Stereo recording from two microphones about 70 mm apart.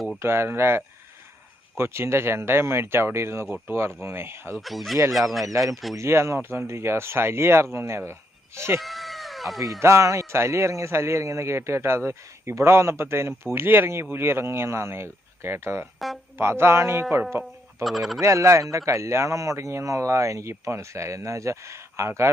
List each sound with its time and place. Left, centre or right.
0.2 s a man's voice: right
4.5 s speech: centre
6.0 s a man's voice: right
8.8 s cat: centre
9.8 s a man's voice: right
17.8 s speech: centre
18.2 s speech: right